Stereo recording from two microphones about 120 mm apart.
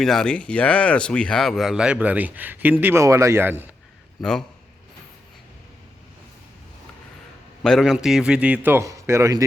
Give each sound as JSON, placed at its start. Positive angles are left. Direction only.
{"t": 0.0, "sound": "speech", "side_deg": 5}
{"t": 4.2, "sound": "a man's voice", "side_deg": 5}
{"t": 7.6, "sound": "a man's voice", "side_deg": 0}